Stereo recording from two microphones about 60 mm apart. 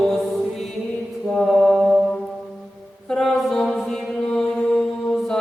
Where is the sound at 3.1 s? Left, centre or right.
Centre.